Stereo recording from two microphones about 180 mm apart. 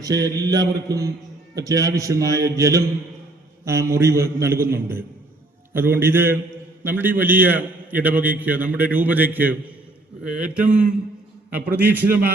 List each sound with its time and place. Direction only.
0.0 s mantra: 20° right (ahead or behind)
1.5 s a man's voice: 20° right (ahead or behind)